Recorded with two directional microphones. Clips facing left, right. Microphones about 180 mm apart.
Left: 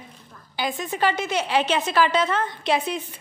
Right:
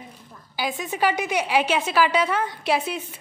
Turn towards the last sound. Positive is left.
turn(degrees=-5)  # may be behind; listen again after turning